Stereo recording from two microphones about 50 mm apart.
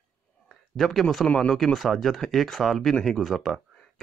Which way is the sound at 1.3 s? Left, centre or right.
Left.